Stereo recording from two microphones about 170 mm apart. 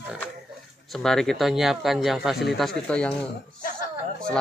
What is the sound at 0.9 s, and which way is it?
Speech, centre (ahead or behind).